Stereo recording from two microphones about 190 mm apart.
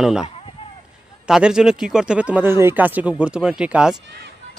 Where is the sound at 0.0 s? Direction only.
5° right (ahead or behind).